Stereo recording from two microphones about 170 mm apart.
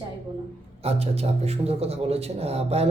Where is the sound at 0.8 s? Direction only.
35° right (ahead or behind).